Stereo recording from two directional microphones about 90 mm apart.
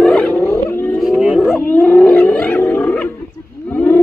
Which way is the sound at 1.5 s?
20° left (ahead or behind).